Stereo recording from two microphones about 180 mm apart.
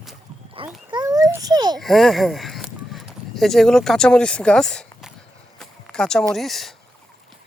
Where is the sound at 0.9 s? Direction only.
20° right (ahead or behind).